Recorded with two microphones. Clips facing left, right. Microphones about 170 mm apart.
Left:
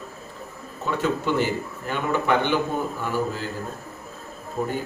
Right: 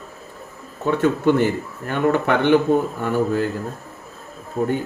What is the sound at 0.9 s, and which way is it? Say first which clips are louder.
A man's voice: right 7 dB; 55° right (ahead or behind).